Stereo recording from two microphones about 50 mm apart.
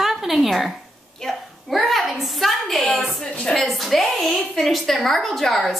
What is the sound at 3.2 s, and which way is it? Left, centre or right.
Speech, centre.